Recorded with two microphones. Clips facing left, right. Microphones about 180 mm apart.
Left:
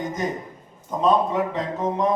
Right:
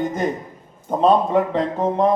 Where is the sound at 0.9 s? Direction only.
30° right (ahead or behind).